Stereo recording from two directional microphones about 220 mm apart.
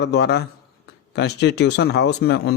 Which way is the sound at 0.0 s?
50° left (ahead or behind).